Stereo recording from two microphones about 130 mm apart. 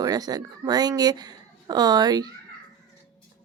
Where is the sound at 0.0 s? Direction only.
30° right (ahead or behind).